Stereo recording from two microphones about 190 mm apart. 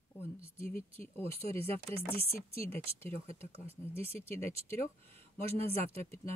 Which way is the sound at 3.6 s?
10° left (ahead or behind).